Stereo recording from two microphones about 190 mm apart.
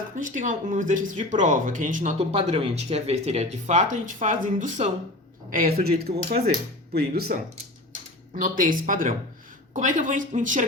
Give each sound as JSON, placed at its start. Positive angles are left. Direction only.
{"t": 0.2, "sound": "speech", "side_deg": -40}
{"t": 8.4, "sound": "speech", "side_deg": -45}